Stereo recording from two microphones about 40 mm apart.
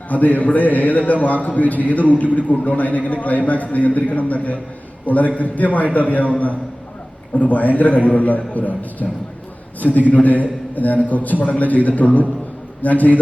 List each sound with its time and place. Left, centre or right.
0.1 s a man's voice: left
7.3 s a man's voice: left